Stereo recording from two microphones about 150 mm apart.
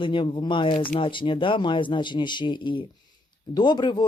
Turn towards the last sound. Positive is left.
turn(degrees=30)  # may be behind; listen again after turning